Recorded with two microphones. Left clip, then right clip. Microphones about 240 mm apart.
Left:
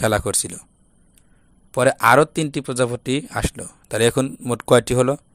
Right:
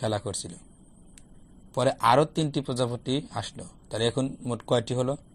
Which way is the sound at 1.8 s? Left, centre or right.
Left.